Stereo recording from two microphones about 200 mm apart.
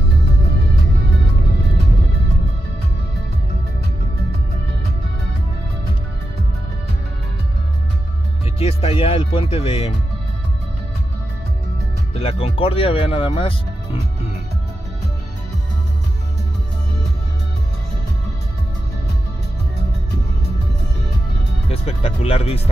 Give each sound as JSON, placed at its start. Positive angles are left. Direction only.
{"t": 8.5, "sound": "speech", "side_deg": 30}
{"t": 12.1, "sound": "speech", "side_deg": 30}
{"t": 21.6, "sound": "speech", "side_deg": 30}